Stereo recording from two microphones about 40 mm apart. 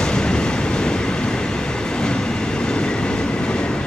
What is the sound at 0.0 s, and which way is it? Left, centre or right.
Train, left.